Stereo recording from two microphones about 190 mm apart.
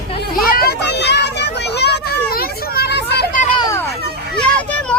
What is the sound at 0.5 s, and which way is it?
Vehicle, 55° left (ahead or behind).